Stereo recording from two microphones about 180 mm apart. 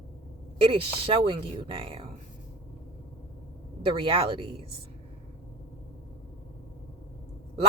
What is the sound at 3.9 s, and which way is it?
Speech, 30° right (ahead or behind).